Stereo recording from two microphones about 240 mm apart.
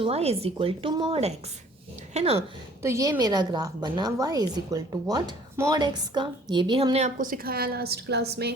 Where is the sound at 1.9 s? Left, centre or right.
Right.